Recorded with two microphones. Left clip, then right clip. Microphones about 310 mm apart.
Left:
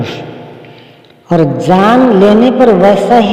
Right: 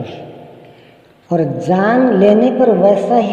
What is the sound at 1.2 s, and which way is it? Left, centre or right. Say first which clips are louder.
A man's voice: left 6 dB; left.